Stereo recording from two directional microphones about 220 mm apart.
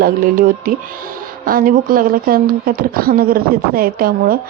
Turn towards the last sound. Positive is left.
turn(degrees=-40)  # may be behind; listen again after turning